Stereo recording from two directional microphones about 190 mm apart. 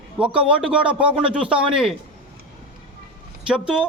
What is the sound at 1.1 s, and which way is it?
Speech, 30° right (ahead or behind).